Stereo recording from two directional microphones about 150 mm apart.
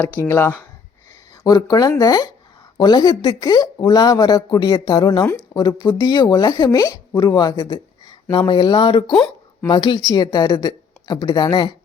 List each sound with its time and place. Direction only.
0.0 s speech: 10° left (ahead or behind); by 11.7 s 30° left (ahead or behind)